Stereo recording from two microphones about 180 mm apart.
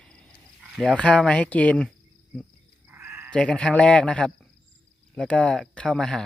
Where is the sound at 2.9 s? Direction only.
10° right (ahead or behind).